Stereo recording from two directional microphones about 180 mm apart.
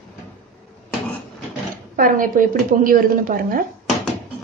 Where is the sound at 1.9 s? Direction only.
50° right (ahead or behind).